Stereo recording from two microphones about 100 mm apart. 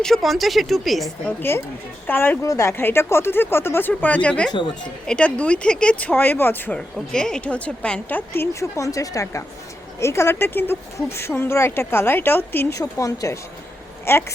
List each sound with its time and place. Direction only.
0.0 s speech: centre (ahead or behind)
1.4 s speech: 25° left (ahead or behind)
6.7 s speech: 5° left (ahead or behind)
8.3 s speech: 30° left (ahead or behind)
12.8 s speech: 35° left (ahead or behind)